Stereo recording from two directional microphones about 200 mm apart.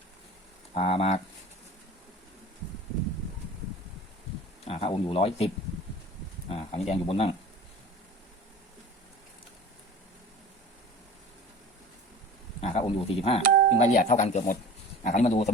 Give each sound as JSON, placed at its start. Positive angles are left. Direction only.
{"t": 0.7, "sound": "speech", "side_deg": 30}
{"t": 4.6, "sound": "speech", "side_deg": 30}
{"t": 6.5, "sound": "speech", "side_deg": 30}
{"t": 12.6, "sound": "speech", "side_deg": 30}
{"t": 13.7, "sound": "speech", "side_deg": 40}